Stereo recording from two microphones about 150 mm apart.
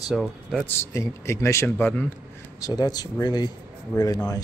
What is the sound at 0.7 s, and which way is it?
A man's voice, 20° left (ahead or behind).